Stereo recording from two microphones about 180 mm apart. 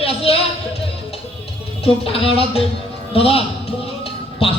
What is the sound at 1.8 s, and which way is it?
A man's voice, 30° left (ahead or behind).